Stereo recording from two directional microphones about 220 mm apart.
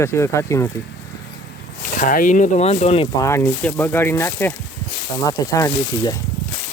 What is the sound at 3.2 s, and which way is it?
Speech, 10° left (ahead or behind).